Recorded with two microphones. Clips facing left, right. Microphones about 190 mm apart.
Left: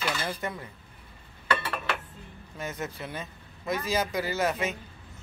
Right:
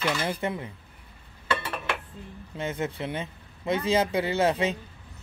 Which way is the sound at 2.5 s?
25° right (ahead or behind).